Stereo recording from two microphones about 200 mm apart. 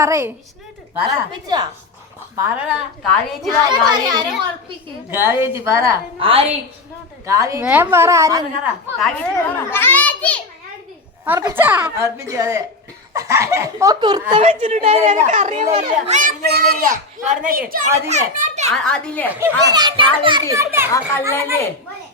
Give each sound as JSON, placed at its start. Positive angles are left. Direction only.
{"t": 0.0, "sound": "a child's voice", "side_deg": -15}
{"t": 2.4, "sound": "a woman's voice", "side_deg": -5}
{"t": 3.7, "sound": "a child's voice", "side_deg": -20}
{"t": 6.1, "sound": "a child's voice", "side_deg": -30}
{"t": 7.3, "sound": "a child's voice", "side_deg": -15}
{"t": 9.0, "sound": "a child's voice", "side_deg": 5}
{"t": 11.3, "sound": "a child's voice", "side_deg": -15}
{"t": 14.3, "sound": "a child's voice", "side_deg": -35}
{"t": 16.5, "sound": "a child's voice", "side_deg": -50}
{"t": 18.7, "sound": "a woman's voice", "side_deg": 5}
{"t": 19.3, "sound": "a child's voice", "side_deg": -15}
{"t": 21.1, "sound": "a child's voice", "side_deg": 10}